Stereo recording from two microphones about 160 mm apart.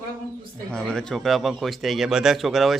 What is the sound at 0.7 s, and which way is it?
Speech, 5° left (ahead or behind).